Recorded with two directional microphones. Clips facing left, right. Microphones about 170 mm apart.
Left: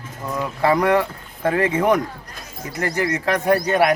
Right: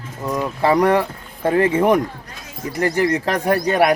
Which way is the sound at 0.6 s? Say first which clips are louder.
Right 1 dB; 35° right (ahead or behind).